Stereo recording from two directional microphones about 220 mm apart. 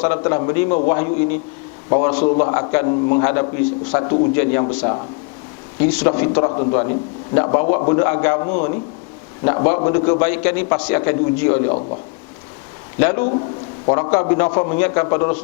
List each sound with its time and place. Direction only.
0.0 s a man's voice: 15° left (ahead or behind)
4.0 s a man's voice: 25° left (ahead or behind)
6.5 s a man's voice: 25° left (ahead or behind)
8.4 s a man's voice: 35° left (ahead or behind)
9.4 s a man's voice: 15° left (ahead or behind)
13.0 s a man's voice: 15° left (ahead or behind)